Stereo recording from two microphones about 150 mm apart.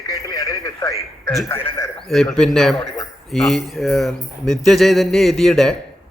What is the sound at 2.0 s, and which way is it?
Speech, centre (ahead or behind).